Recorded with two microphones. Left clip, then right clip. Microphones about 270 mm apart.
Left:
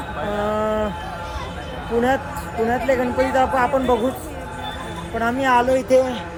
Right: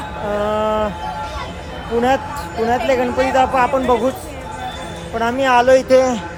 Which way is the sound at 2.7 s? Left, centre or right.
Centre.